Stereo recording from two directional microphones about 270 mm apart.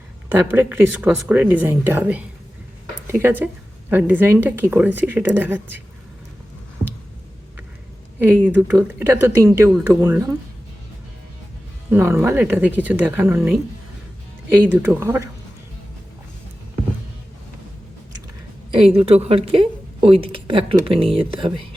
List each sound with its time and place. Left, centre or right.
0.3 s a woman's voice: centre
3.4 s a woman's voice: centre
8.2 s a woman's voice: centre
11.9 s a woman's voice: centre
18.7 s a woman's voice: right